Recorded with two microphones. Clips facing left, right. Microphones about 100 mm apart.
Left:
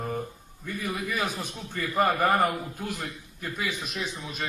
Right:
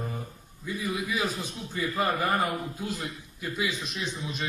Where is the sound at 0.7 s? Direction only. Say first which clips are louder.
Right 1 dB; 55° left (ahead or behind).